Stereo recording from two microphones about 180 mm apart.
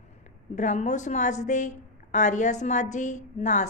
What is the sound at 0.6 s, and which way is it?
A woman's voice, 40° left (ahead or behind).